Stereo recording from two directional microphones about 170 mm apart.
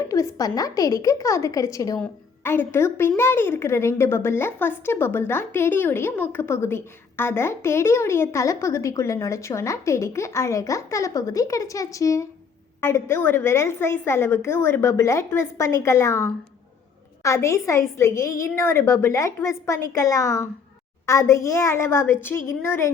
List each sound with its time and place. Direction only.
0.1 s a woman's voice: 20° left (ahead or behind)